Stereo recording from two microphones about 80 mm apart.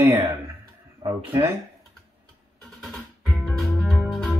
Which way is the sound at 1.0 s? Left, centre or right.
Right.